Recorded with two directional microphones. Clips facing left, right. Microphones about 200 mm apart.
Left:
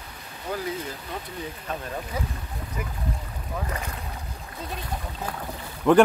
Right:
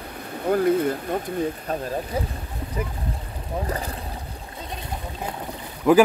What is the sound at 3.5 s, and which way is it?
Speech, 35° right (ahead or behind).